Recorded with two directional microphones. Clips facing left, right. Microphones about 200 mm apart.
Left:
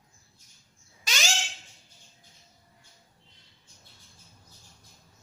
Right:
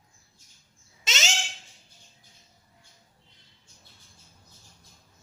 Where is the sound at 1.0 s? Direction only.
20° right (ahead or behind).